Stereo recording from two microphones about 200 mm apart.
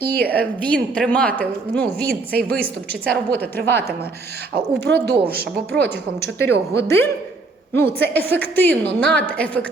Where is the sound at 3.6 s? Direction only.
10° left (ahead or behind).